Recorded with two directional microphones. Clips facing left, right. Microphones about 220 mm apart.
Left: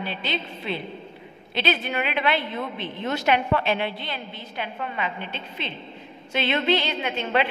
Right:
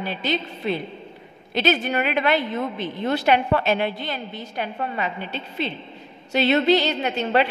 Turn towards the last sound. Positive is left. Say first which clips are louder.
# right 3 dB
turn(degrees=-40)  # may be behind; listen again after turning